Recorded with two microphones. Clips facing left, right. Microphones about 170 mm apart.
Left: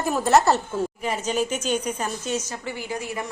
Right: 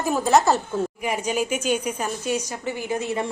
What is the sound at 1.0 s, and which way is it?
A woman's voice, 10° right (ahead or behind).